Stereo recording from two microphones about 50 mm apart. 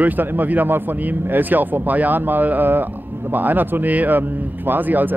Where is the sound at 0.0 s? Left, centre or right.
Right.